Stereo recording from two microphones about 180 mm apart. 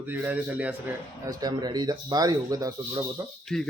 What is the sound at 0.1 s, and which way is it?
Speech, 10° right (ahead or behind).